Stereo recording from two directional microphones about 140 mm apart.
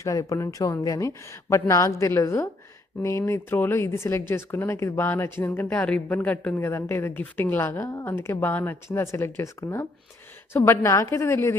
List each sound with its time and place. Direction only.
0.0 s speech: 20° left (ahead or behind)